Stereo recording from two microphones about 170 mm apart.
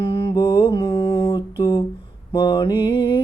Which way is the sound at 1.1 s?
30° left (ahead or behind).